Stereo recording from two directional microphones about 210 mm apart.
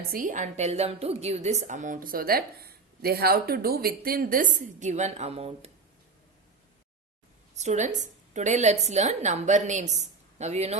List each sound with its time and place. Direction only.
0.1 s a woman's voice: 40° right (ahead or behind)
7.5 s a woman's voice: 35° right (ahead or behind)